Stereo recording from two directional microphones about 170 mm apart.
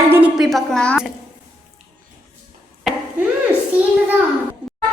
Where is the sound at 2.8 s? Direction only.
Centre (ahead or behind).